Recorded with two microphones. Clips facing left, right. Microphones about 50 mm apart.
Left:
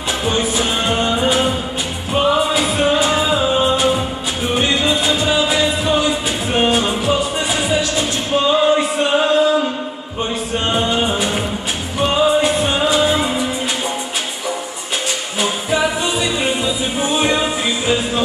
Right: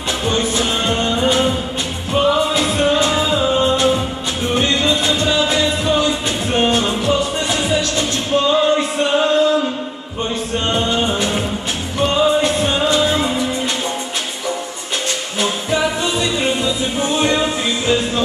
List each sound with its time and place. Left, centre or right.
0.2 s music: centre
15.4 s music: centre